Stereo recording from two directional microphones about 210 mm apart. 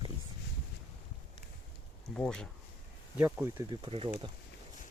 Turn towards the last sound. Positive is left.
turn(degrees=-20)  # may be behind; listen again after turning